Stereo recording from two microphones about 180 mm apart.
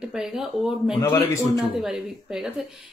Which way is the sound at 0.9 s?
15° left (ahead or behind).